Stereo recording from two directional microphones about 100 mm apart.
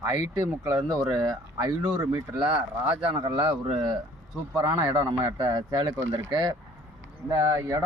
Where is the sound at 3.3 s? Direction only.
55° right (ahead or behind); by 7.8 s 35° right (ahead or behind).